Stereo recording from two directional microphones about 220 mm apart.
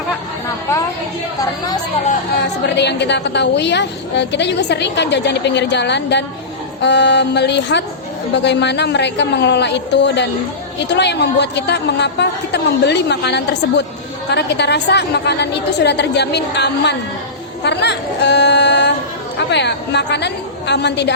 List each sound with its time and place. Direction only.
1.4 s speech: 15° left (ahead or behind)
2.6 s a woman's voice: 50° left (ahead or behind)